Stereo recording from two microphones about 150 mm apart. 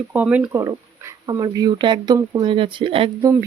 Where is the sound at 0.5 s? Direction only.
20° right (ahead or behind); by 3.2 s 35° right (ahead or behind).